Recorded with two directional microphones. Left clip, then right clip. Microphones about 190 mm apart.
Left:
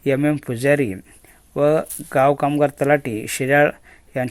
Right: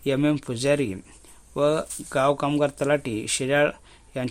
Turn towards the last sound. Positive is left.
turn(degrees=15)  # may be behind; listen again after turning